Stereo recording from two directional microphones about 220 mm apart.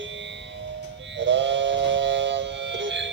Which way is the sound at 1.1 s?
55° right (ahead or behind).